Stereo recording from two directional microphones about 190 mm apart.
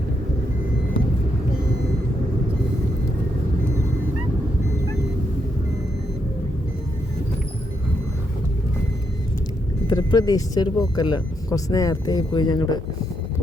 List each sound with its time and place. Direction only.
9.8 s speech: 25° left (ahead or behind)